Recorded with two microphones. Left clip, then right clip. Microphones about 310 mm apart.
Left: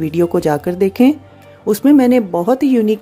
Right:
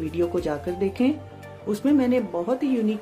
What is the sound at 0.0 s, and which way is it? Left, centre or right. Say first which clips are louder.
Speech: left 10 dB; left.